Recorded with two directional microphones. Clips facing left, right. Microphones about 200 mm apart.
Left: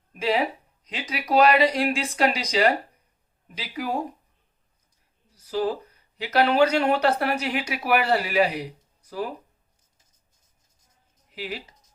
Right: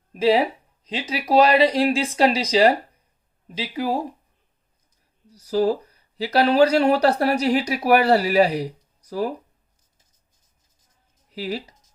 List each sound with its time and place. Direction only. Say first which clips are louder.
0.1 s speech: right 6 dB; 35° right (ahead or behind)
5.3 s speech: right 6 dB; 40° right (ahead or behind)
11.3 s speech: right 6 dB; 40° right (ahead or behind)